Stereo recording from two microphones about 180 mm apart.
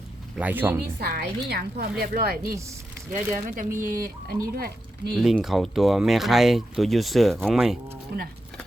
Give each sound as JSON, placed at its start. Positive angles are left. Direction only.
{"t": 0.3, "sound": "speech", "side_deg": -10}
{"t": 0.9, "sound": "a woman's voice", "side_deg": -60}
{"t": 5.1, "sound": "speech", "side_deg": 0}
{"t": 8.1, "sound": "a woman's voice", "side_deg": -60}